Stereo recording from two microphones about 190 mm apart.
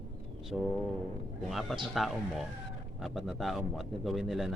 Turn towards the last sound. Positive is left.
turn(degrees=0)  # may be behind; listen again after turning